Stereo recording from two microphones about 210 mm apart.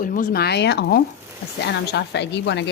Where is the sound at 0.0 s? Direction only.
40° left (ahead or behind).